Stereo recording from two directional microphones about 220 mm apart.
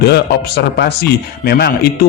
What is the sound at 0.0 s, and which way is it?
Speech, 50° left (ahead or behind).